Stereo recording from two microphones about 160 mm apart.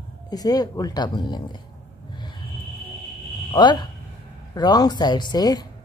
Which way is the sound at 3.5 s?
25° left (ahead or behind).